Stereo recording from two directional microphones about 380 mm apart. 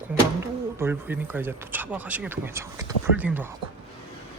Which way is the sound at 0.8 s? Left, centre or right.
Centre.